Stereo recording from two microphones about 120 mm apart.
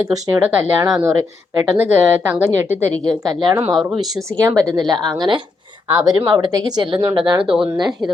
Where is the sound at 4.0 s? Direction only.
30° right (ahead or behind).